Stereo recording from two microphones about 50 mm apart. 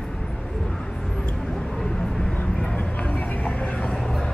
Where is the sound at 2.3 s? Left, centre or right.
Centre.